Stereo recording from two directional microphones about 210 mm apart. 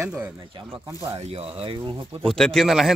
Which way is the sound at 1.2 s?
25° right (ahead or behind).